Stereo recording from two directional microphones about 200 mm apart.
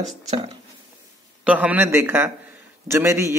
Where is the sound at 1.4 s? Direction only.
5° right (ahead or behind).